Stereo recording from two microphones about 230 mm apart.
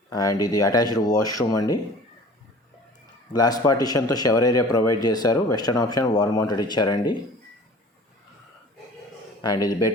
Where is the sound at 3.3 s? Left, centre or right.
Centre.